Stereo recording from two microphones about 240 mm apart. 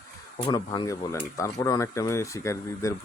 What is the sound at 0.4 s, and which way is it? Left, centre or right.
Speech, centre.